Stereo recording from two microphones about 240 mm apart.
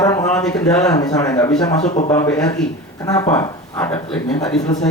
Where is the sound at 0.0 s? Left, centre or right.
Centre.